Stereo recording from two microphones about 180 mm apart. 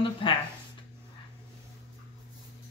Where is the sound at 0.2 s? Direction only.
30° left (ahead or behind).